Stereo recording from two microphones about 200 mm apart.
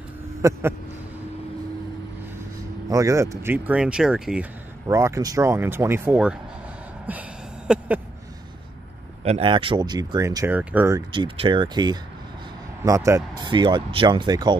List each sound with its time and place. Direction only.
0.4 s speech: 15° right (ahead or behind)
2.9 s speech: 15° right (ahead or behind)
4.8 s speech: 15° right (ahead or behind)
7.1 s a sound: 5° right (ahead or behind)
9.2 s speech: 30° right (ahead or behind)